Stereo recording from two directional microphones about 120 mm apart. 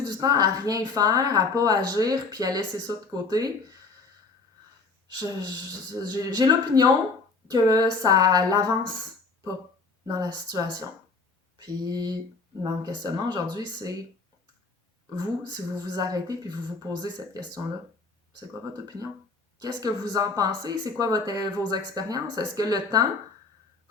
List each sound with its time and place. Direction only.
0.0 s speech: 35° right (ahead or behind)
5.0 s speech: 35° right (ahead or behind)
10.1 s speech: 30° right (ahead or behind)
11.5 s a sound: 35° right (ahead or behind)
12.8 s speech: 35° right (ahead or behind)
15.1 s speech: 35° right (ahead or behind)
19.5 s speech: 35° right (ahead or behind)